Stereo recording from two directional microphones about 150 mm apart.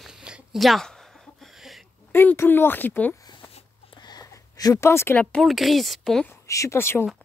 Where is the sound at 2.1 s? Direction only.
15° left (ahead or behind).